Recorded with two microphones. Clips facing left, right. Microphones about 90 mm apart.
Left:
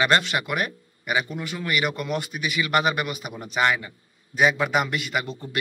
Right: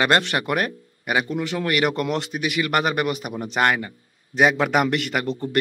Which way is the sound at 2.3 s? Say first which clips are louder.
Right 1 dB; 55° right (ahead or behind).